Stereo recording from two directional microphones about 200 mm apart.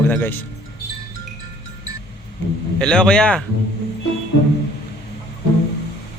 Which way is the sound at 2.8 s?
5° left (ahead or behind).